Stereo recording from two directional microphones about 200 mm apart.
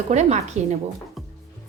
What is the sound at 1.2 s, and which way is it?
Music, centre (ahead or behind).